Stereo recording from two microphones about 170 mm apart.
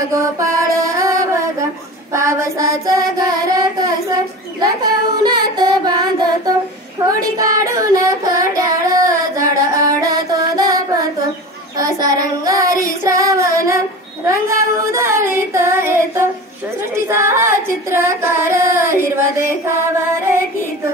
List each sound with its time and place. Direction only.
0.1 s mantra: 20° right (ahead or behind)
2.1 s child singing: 15° right (ahead or behind)
16.9 s female singing: 15° right (ahead or behind)
19.7 s music: 15° right (ahead or behind)